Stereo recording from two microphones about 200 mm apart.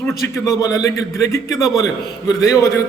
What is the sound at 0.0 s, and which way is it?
A man's voice, 15° left (ahead or behind).